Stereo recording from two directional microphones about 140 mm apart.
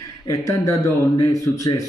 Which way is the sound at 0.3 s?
25° left (ahead or behind).